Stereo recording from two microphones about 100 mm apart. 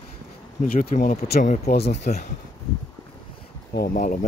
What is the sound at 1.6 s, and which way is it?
Speech, 90° left.